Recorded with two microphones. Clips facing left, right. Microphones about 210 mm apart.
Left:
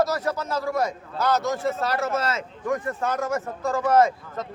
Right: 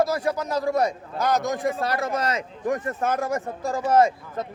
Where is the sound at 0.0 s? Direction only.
15° right (ahead or behind).